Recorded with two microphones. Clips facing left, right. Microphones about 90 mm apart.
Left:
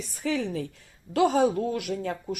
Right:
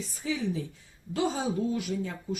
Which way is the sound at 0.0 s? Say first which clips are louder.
Left 3 dB; 65° left (ahead or behind).